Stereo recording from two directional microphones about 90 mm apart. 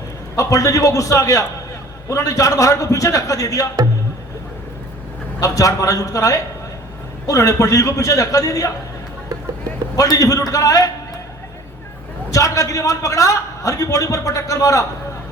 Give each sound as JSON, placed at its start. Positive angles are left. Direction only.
{"t": 0.3, "sound": "a man's voice", "side_deg": 40}
{"t": 5.4, "sound": "a man's voice", "side_deg": 35}
{"t": 9.9, "sound": "a man's voice", "side_deg": 40}
{"t": 12.3, "sound": "a man's voice", "side_deg": 40}